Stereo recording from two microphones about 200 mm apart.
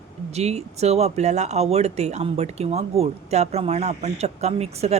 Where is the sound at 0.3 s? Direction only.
35° right (ahead or behind).